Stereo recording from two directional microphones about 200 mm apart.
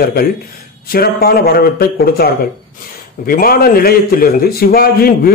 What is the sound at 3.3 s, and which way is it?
Speech, 45° left (ahead or behind).